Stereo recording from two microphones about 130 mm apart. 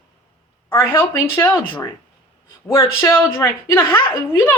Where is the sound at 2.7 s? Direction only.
20° left (ahead or behind).